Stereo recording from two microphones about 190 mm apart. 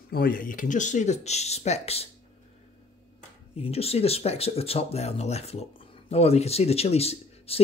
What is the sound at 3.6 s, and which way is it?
Speech, 30° left (ahead or behind).